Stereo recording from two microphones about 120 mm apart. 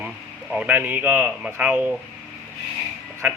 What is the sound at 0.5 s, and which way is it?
A man's voice, 5° right (ahead or behind).